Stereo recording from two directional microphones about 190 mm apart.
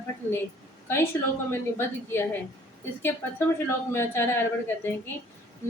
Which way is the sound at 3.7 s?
15° left (ahead or behind).